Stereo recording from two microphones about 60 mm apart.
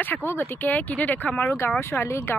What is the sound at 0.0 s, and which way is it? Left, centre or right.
A woman's voice, left.